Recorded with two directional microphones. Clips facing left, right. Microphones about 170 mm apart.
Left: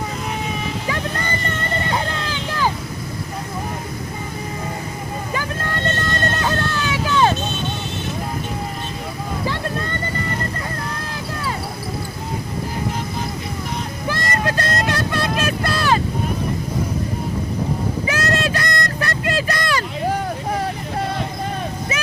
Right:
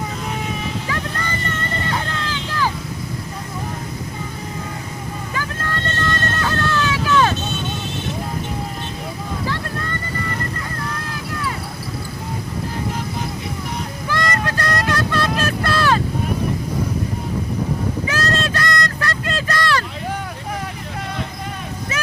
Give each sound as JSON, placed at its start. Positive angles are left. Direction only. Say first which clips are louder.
{"t": 1.9, "sound": "vehicle", "louder": "left 1 dB", "side_deg": 20}
{"t": 5.3, "sound": "vehicle", "louder": "left 1 dB", "side_deg": 20}
{"t": 14.1, "sound": "vehicle", "louder": "even", "side_deg": 20}
{"t": 18.1, "sound": "vehicle", "louder": "left 3 dB", "side_deg": 15}